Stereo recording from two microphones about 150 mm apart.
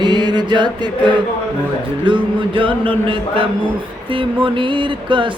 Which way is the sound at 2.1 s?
35° right (ahead or behind).